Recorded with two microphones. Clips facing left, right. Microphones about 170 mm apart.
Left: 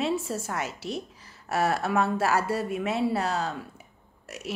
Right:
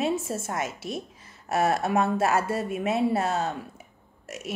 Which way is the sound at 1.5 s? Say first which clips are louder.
Right 2 dB; 20° right (ahead or behind).